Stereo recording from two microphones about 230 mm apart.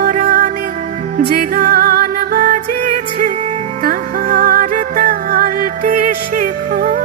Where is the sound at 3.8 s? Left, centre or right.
Right.